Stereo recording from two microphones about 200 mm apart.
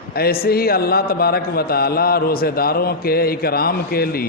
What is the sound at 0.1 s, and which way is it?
A man's voice, 50° left (ahead or behind).